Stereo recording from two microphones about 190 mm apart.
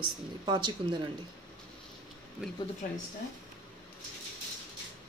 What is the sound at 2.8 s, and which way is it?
Speech, 45° left (ahead or behind).